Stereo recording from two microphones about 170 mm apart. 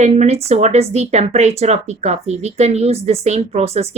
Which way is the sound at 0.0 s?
40° right (ahead or behind).